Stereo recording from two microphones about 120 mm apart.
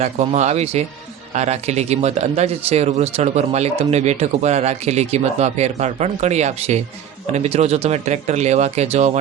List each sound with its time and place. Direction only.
0.0 s speech: 65° right (ahead or behind)